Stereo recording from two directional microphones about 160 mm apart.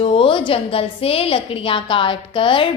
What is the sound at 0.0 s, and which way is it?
A woman's voice, 35° left (ahead or behind).